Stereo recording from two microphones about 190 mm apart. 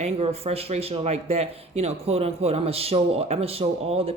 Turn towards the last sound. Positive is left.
turn(degrees=-30)  # may be behind; listen again after turning